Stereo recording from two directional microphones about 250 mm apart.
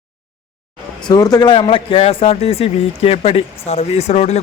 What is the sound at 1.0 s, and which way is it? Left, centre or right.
A man's voice, centre.